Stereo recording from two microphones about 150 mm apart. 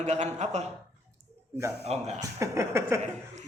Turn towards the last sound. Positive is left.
turn(degrees=-20)  # may be behind; listen again after turning